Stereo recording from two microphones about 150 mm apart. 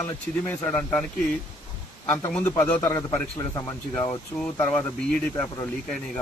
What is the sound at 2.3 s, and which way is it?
A man's voice, 10° left (ahead or behind).